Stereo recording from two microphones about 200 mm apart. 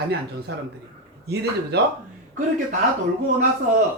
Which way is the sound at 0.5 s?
60° right (ahead or behind).